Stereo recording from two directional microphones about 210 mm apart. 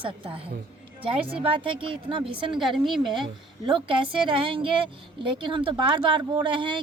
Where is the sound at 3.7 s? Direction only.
25° right (ahead or behind).